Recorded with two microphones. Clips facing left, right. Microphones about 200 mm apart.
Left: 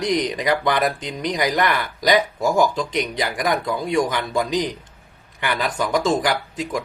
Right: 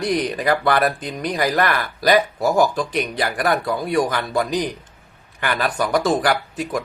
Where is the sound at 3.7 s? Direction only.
20° left (ahead or behind).